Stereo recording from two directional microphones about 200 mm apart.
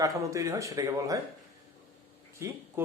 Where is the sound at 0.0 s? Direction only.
15° right (ahead or behind).